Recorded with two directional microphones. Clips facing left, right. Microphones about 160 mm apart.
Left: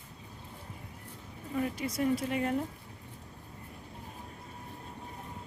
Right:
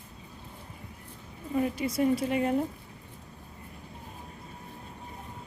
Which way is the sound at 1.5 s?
20° right (ahead or behind).